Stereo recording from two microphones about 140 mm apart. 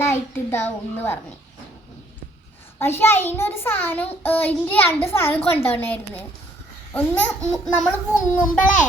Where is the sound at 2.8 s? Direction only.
15° left (ahead or behind).